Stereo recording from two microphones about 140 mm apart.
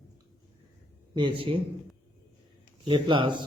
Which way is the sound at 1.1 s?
35° right (ahead or behind).